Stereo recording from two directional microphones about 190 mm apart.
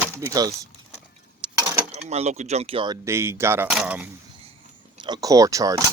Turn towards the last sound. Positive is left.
turn(degrees=-15)  # may be behind; listen again after turning